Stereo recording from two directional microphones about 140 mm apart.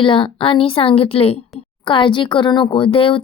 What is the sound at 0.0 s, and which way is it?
A woman's voice, 35° left (ahead or behind).